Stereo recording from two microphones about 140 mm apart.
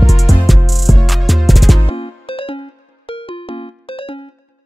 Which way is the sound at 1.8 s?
40° left (ahead or behind).